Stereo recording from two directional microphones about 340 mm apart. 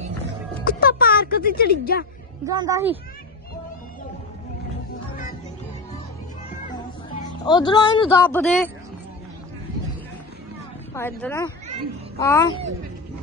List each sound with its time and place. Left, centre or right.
0.8 s speech: left
2.4 s speech: centre
7.2 s speech: centre
11.0 s speech: centre